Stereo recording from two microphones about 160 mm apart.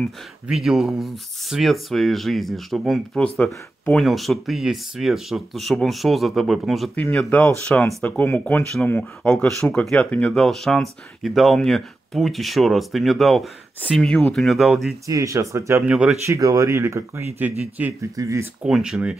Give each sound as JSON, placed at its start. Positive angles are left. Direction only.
{"t": 0.0, "sound": "speech", "side_deg": 0}
{"t": 15.0, "sound": "speech", "side_deg": -20}
{"t": 15.9, "sound": "speech", "side_deg": -5}
{"t": 16.3, "sound": "speech", "side_deg": -20}
{"t": 18.6, "sound": "speech", "side_deg": -5}